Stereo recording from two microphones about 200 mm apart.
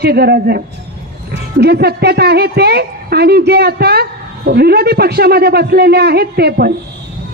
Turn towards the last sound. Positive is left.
turn(degrees=-50)  # may be behind; listen again after turning